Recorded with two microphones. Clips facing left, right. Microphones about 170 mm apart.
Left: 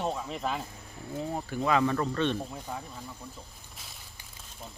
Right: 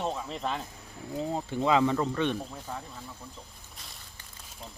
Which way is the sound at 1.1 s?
20° right (ahead or behind).